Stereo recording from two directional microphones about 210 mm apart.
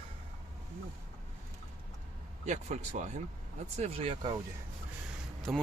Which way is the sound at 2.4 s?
35° right (ahead or behind).